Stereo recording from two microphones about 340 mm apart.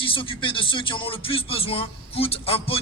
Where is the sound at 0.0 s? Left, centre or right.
Centre.